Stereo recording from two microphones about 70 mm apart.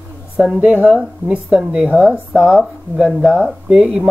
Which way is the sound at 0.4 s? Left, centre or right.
Centre.